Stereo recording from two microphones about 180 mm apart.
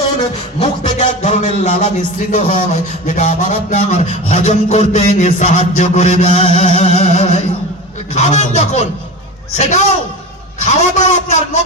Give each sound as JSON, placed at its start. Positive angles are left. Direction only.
{"t": 0.6, "sound": "a man's voice", "side_deg": 35}